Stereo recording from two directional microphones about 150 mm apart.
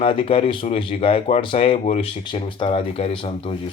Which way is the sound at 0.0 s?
40° left (ahead or behind).